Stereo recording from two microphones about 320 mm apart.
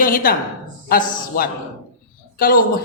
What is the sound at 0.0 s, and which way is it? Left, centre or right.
A woman's voice, left.